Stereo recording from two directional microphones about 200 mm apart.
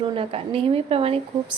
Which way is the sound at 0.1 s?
25° right (ahead or behind).